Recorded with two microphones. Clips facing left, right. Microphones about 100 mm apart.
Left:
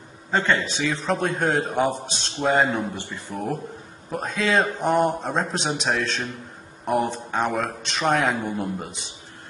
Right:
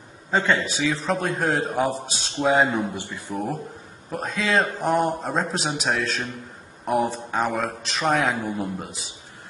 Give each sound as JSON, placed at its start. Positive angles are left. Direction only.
{"t": 0.3, "sound": "a man's voice", "side_deg": -5}
{"t": 3.0, "sound": "speech", "side_deg": -15}
{"t": 4.1, "sound": "a man's voice", "side_deg": 0}